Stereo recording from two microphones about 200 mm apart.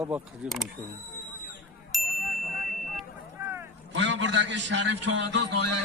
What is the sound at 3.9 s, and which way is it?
A man's voice, 65° right (ahead or behind).